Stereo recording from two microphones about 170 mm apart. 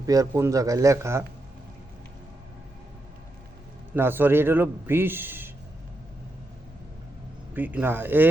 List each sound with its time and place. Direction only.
0.0 s speech: 20° right (ahead or behind)
3.9 s a man's voice: 15° right (ahead or behind)
7.5 s a man's voice: 10° right (ahead or behind)